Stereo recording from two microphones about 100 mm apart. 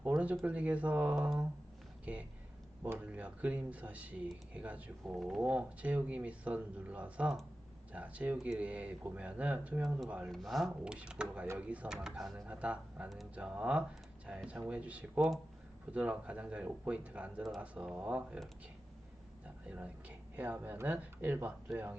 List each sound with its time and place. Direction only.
0.0 s a sound: 15° right (ahead or behind)
0.4 s speech: 15° right (ahead or behind)
5.1 s speech: centre (ahead or behind)
5.4 s speech: 15° right (ahead or behind)
10.3 s speech: centre (ahead or behind)
19.6 s speech: 15° right (ahead or behind)